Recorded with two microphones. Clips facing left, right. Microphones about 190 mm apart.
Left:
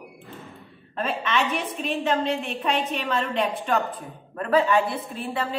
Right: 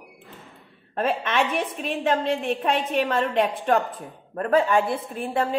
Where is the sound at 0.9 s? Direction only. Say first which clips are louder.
Right 2 dB; 50° right (ahead or behind).